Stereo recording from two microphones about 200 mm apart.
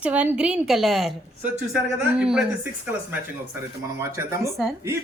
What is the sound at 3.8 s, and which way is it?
Speech, 15° right (ahead or behind).